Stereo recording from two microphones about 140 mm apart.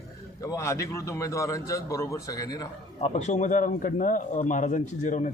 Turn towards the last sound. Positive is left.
turn(degrees=65)  # may be behind; listen again after turning